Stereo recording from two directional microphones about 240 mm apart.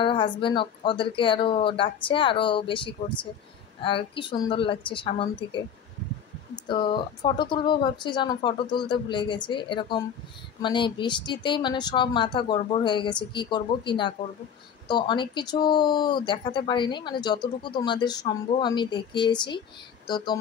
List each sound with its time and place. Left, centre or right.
0.0 s speech: left
6.7 s speech: centre